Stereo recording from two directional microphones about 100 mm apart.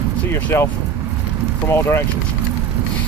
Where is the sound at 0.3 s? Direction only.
25° left (ahead or behind).